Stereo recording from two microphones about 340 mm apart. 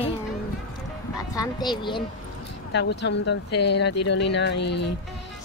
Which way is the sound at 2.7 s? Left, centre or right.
Left.